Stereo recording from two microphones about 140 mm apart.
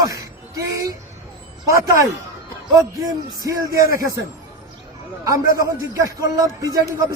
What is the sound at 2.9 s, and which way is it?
Speech, 25° right (ahead or behind).